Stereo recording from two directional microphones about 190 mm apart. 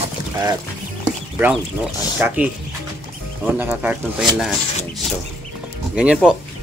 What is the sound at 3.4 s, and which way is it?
Speech, 10° right (ahead or behind).